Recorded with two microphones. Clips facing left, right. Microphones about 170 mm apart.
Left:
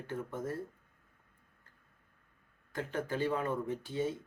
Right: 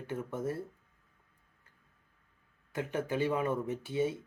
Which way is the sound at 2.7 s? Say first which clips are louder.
Right 2 dB; 10° right (ahead or behind).